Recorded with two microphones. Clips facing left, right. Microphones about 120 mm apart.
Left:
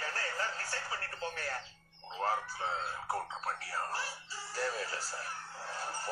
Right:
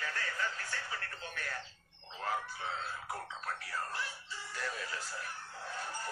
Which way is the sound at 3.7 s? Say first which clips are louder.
Left 2 dB; 35° left (ahead or behind).